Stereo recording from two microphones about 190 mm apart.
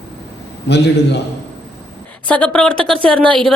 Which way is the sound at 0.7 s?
65° left (ahead or behind).